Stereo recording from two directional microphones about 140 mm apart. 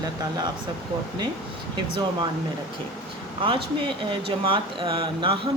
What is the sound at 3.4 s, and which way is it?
Speech, 35° right (ahead or behind).